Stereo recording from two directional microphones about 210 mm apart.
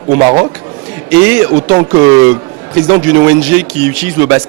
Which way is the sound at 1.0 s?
10° right (ahead or behind).